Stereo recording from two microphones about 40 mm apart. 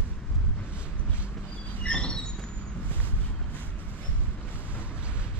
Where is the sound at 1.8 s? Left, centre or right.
Left.